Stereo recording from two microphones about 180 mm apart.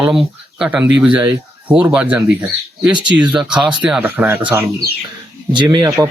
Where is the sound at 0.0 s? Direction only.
5° right (ahead or behind).